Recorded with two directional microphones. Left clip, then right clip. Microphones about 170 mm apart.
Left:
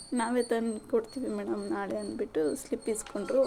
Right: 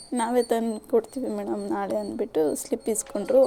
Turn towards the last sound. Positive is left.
turn(degrees=-20)  # may be behind; listen again after turning